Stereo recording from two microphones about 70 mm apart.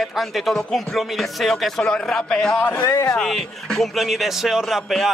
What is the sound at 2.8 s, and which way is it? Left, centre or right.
Speech, left.